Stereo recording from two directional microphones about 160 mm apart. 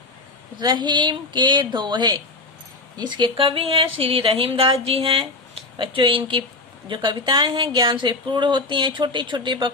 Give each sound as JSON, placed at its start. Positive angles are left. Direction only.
{"t": 0.6, "sound": "speech", "side_deg": -30}